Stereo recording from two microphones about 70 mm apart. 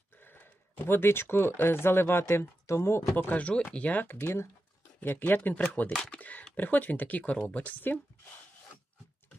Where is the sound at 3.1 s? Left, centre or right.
Left.